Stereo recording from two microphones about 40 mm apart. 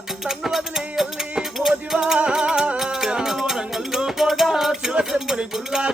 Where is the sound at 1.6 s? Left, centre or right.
Centre; by 2.7 s right.